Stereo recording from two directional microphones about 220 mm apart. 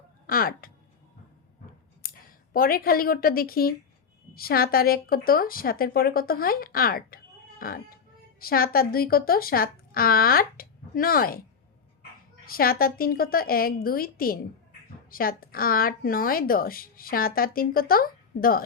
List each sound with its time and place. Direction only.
0.3 s speech: 40° left (ahead or behind)
2.0 s a woman's voice: 40° left (ahead or behind)
12.5 s speech: 40° left (ahead or behind)